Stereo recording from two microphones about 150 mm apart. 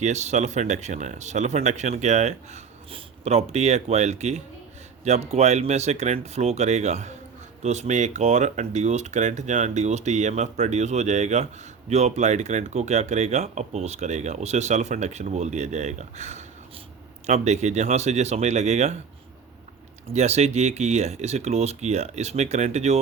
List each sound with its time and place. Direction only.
0.0 s speech: 50° right (ahead or behind)
20.1 s speech: 45° right (ahead or behind)